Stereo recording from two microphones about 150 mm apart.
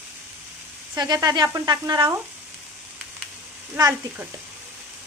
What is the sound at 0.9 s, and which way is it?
Speech, 25° right (ahead or behind).